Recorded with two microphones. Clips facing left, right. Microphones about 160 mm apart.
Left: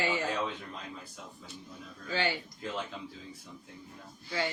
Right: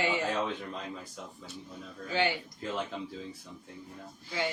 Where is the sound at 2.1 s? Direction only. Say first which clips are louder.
Right 2 dB; 20° right (ahead or behind).